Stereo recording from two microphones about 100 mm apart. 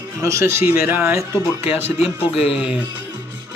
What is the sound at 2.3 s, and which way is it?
Speech, 80° left.